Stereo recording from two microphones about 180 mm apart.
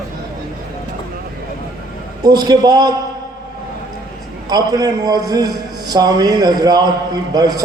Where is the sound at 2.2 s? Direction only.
20° right (ahead or behind).